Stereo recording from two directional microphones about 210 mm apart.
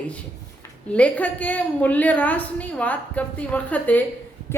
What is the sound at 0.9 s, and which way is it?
A woman's voice, 5° left (ahead or behind).